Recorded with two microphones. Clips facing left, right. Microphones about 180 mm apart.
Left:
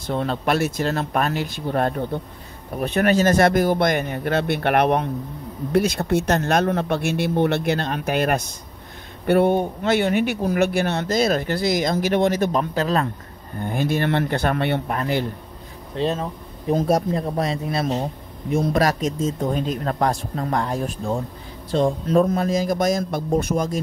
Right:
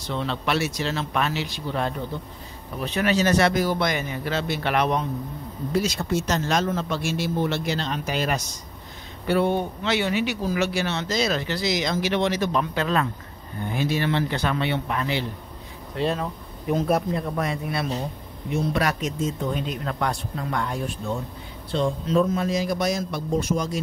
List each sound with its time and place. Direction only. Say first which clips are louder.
0.0 s speech: left 4 dB; 50° left (ahead or behind)
13.6 s speech: left 3 dB; 50° left (ahead or behind)
16.1 s speech: left 2 dB; 25° left (ahead or behind)
16.7 s speech: left 3 dB; 35° left (ahead or behind)
18.5 s speech: left 4 dB; 45° left (ahead or behind)
21.7 s speech: left 4 dB; 50° left (ahead or behind)